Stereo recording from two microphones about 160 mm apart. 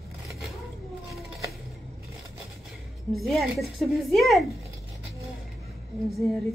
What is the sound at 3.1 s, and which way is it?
A woman's voice, centre (ahead or behind).